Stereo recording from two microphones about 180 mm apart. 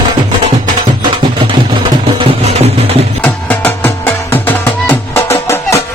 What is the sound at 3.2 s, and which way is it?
Music, 10° left (ahead or behind).